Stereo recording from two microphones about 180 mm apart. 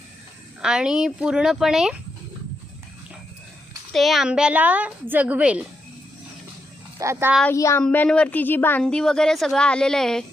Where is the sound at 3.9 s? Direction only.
Centre (ahead or behind).